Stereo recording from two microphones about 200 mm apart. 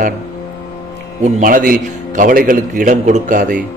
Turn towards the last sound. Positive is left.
turn(degrees=-40)  # may be behind; listen again after turning